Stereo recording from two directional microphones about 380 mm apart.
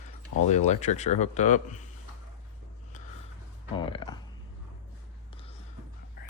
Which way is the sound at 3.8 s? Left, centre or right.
Centre.